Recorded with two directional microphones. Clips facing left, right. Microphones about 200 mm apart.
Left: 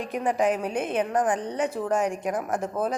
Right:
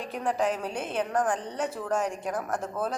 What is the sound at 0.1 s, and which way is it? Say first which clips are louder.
A woman's voice: left 4 dB; 10° left (ahead or behind).